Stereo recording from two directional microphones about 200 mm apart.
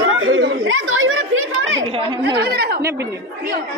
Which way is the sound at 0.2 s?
70° right (ahead or behind).